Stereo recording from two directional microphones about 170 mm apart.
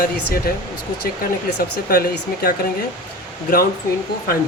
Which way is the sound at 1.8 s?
60° left (ahead or behind).